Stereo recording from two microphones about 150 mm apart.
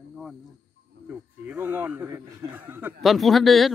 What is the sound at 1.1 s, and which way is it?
Speech, 10° right (ahead or behind).